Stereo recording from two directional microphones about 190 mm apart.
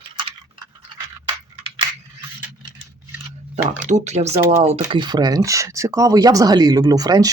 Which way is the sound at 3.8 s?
40° right (ahead or behind).